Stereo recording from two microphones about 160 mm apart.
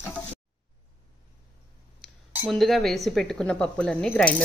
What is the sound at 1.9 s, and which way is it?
Cutlery, centre (ahead or behind).